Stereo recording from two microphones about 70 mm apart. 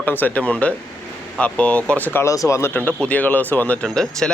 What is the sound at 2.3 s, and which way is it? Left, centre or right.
Speech, left.